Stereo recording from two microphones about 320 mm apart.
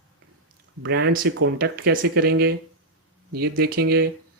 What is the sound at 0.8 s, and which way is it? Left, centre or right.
Speech, right.